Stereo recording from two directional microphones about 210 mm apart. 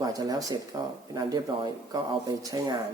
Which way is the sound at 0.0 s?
15° right (ahead or behind).